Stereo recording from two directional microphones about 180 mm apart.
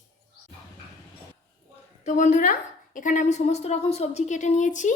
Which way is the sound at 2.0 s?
45° left (ahead or behind).